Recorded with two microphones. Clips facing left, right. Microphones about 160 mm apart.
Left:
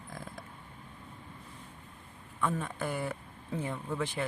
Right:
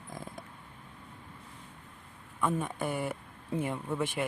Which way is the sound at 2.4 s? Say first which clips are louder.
Right 2 dB; 15° right (ahead or behind).